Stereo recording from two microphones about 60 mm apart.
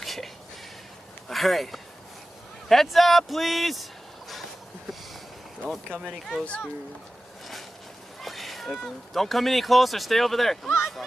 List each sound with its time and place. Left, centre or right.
0.0 s a sound: centre
1.3 s speech: centre
6.4 s speech: centre
8.2 s speech: centre